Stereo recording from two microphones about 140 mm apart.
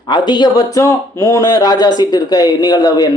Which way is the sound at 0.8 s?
20° left (ahead or behind).